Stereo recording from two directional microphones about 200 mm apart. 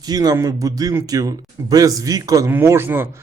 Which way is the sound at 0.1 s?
20° right (ahead or behind).